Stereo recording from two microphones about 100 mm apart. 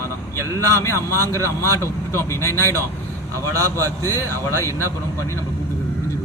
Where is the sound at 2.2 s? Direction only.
30° left (ahead or behind).